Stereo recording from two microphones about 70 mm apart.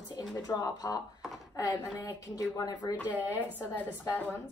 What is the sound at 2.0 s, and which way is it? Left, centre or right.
Speech, left.